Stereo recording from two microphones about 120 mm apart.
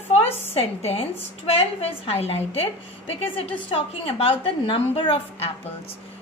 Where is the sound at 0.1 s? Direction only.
55° left (ahead or behind).